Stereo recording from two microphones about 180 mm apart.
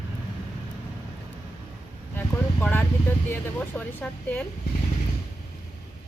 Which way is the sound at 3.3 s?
10° left (ahead or behind).